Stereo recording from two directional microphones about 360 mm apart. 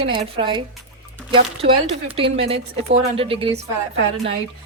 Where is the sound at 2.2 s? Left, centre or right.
Centre.